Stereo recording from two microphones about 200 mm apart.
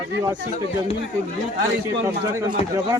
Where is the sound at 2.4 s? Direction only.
15° right (ahead or behind).